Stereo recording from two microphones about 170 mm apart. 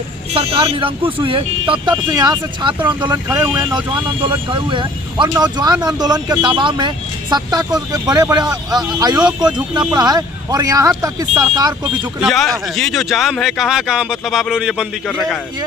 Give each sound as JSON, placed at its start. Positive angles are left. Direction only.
{"t": 0.3, "sound": "speech", "side_deg": -35}
{"t": 12.2, "sound": "speech", "side_deg": 0}